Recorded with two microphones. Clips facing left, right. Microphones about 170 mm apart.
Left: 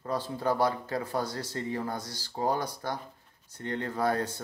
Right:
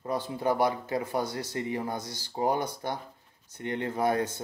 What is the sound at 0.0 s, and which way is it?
Speech, 15° right (ahead or behind).